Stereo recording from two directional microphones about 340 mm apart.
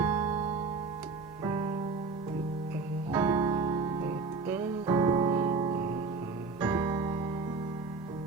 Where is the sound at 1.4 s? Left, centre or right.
Centre.